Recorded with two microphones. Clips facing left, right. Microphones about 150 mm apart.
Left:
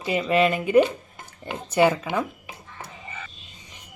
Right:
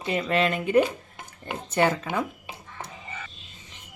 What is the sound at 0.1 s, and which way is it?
Speech, 5° left (ahead or behind).